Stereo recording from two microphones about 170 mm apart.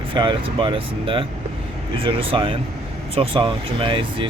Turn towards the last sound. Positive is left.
turn(degrees=-30)  # may be behind; listen again after turning